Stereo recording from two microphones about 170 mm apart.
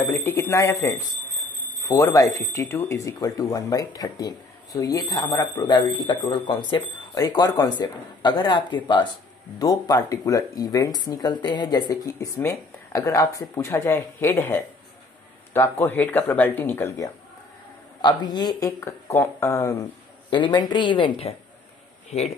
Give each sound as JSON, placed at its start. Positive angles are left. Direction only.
{"t": 0.0, "sound": "speech", "side_deg": 15}
{"t": 18.0, "sound": "speech", "side_deg": 25}